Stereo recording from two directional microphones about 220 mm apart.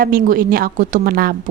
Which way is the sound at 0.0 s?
40° right (ahead or behind).